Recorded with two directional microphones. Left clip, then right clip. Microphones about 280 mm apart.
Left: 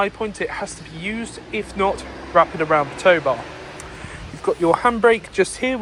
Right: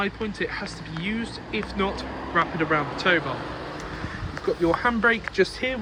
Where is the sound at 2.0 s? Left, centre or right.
Right.